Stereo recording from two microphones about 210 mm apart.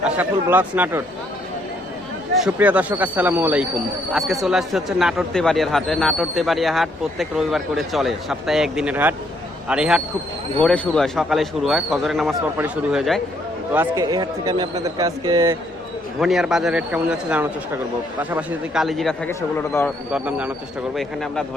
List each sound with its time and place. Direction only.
0.0 s a man's voice: 10° right (ahead or behind)
2.4 s a man's voice: 5° right (ahead or behind)
13.7 s a man's voice: 15° right (ahead or behind)
16.2 s speech: centre (ahead or behind)
19.3 s speech: 10° left (ahead or behind)
20.1 s speech: 5° right (ahead or behind)